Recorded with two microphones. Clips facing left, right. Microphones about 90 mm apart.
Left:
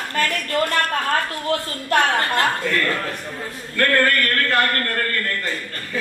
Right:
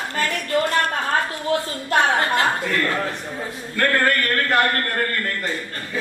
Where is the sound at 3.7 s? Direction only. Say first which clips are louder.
Left 1 dB; 20° right (ahead or behind).